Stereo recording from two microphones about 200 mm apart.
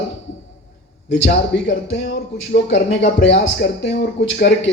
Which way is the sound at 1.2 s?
60° left (ahead or behind).